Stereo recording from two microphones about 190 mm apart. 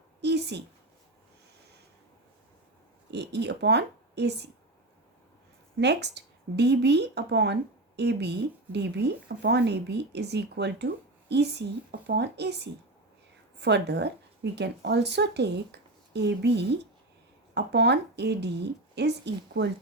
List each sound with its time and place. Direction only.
0.2 s a sound: 60° right (ahead or behind)
3.1 s speech: 65° right (ahead or behind)
5.8 s speech: 60° right (ahead or behind)